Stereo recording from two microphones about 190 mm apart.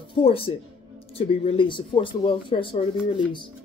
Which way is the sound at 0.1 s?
30° left (ahead or behind).